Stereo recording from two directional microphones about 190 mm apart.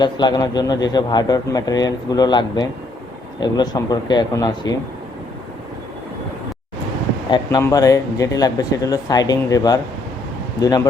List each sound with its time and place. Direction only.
0.0 s speech: 25° left (ahead or behind)
7.3 s speech: 25° left (ahead or behind)